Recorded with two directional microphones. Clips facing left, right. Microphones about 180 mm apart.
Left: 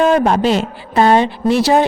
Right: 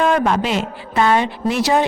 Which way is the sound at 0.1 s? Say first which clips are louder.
Left 4 dB; 35° left (ahead or behind).